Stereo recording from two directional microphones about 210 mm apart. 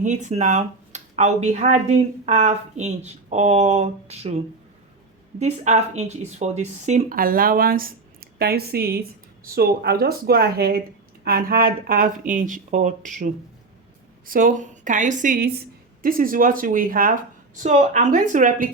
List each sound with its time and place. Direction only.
0.0 s speech: 35° right (ahead or behind)
14.3 s speech: 40° right (ahead or behind)